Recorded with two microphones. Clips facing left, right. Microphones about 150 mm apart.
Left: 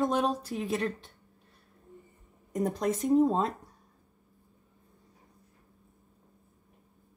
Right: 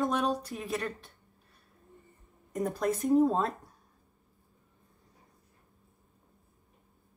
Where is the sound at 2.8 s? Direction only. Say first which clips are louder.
Even; 20° left (ahead or behind).